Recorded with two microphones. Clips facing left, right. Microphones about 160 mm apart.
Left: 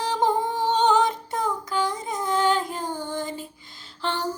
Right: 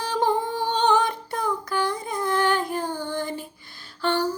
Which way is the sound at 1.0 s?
20° left (ahead or behind).